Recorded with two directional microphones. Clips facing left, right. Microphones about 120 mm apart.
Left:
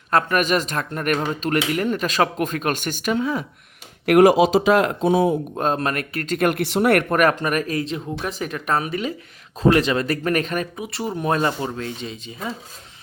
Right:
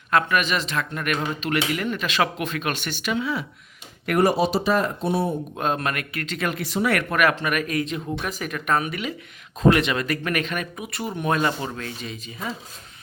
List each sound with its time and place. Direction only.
0.1 s speech: 40° left (ahead or behind)
4.0 s speech: 80° left
5.5 s speech: 35° left (ahead or behind)
6.5 s speech: 65° left (ahead or behind)
7.1 s speech: 40° left (ahead or behind); by 12.5 s 25° left (ahead or behind)